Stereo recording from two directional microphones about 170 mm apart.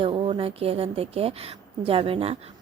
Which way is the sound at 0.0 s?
30° right (ahead or behind).